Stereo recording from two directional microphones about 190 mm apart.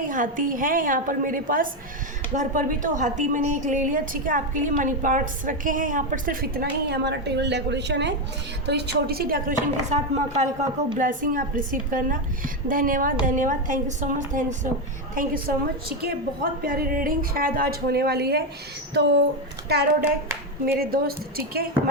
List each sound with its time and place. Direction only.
0.1 s a woman's voice: 45° right (ahead or behind)
15.1 s a woman's voice: 50° right (ahead or behind)
20.7 s a woman's voice: 55° right (ahead or behind)